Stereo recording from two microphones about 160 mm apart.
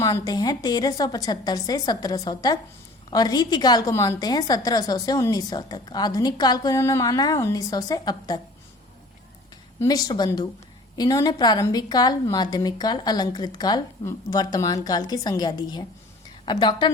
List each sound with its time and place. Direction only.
0.0 s a woman's voice: 20° left (ahead or behind)
9.8 s a woman's voice: 25° left (ahead or behind)